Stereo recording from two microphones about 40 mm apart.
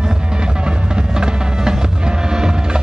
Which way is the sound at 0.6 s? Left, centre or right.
Centre.